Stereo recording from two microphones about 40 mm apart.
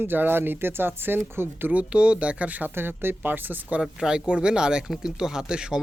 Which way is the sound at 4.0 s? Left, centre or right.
Centre.